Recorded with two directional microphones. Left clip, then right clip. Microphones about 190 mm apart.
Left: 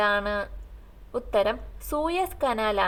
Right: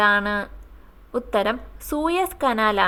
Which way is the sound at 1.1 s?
35° right (ahead or behind).